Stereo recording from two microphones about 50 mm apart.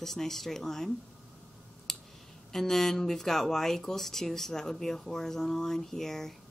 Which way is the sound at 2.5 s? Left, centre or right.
Centre.